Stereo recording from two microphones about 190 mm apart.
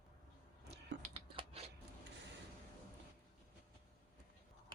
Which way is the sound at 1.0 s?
30° right (ahead or behind).